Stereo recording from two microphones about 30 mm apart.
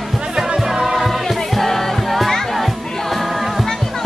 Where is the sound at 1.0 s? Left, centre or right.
Centre.